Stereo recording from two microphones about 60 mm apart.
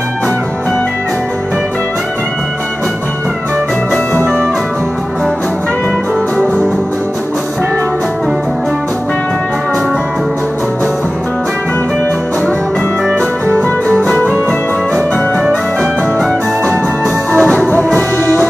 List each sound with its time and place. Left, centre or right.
17.3 s music: centre